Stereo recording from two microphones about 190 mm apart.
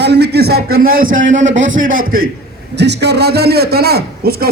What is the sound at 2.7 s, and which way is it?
A man's voice, 65° right (ahead or behind).